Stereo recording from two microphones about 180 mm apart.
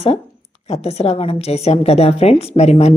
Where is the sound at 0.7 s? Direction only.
35° left (ahead or behind).